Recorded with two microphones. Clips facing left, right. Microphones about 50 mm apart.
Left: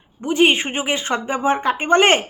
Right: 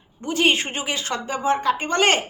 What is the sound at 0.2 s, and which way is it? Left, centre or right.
Speech, left.